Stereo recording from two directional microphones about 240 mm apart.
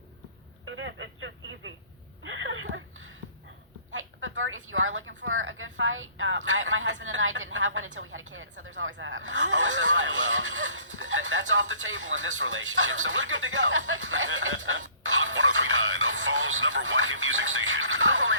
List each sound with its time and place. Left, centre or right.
0.6 s speech: right
2.2 s a sound: right
3.9 s a woman's voice: right